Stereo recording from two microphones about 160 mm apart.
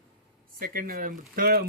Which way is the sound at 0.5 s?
65° right (ahead or behind).